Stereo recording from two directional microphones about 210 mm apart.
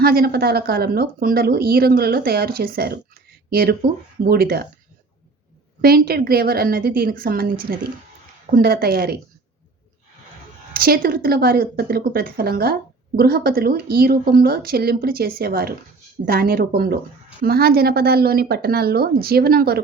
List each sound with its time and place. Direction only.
0.0 s speech: 45° right (ahead or behind)
5.8 s speech: 45° right (ahead or behind)
10.8 s speech: 45° right (ahead or behind)